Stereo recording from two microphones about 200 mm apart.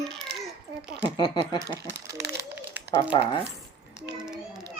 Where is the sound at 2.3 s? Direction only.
10° right (ahead or behind).